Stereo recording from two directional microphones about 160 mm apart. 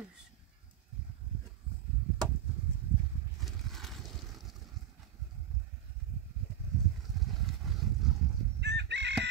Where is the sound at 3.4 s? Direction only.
Centre (ahead or behind).